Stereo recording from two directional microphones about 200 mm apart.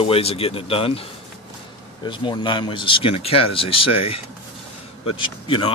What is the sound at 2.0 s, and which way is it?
A man's voice, 25° left (ahead or behind).